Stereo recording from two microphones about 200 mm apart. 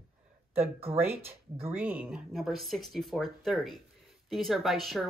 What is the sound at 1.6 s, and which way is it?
Speech, 10° right (ahead or behind).